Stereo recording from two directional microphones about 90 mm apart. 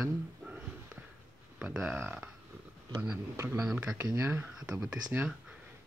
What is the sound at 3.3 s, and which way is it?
Speech, 25° right (ahead or behind).